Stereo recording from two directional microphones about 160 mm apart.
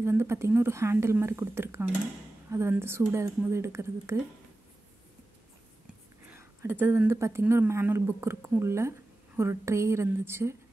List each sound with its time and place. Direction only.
0.0 s speech: 15° right (ahead or behind)
6.3 s speech: 15° right (ahead or behind)